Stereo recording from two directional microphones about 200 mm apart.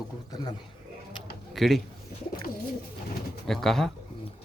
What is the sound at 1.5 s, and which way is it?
Speech, centre (ahead or behind).